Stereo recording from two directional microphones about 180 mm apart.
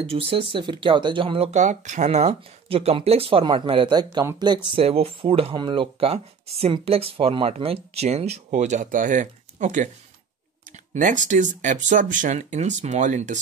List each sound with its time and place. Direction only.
0.0 s speech: 35° right (ahead or behind)
4.7 s speech: 30° right (ahead or behind)
11.0 s speech: 45° right (ahead or behind)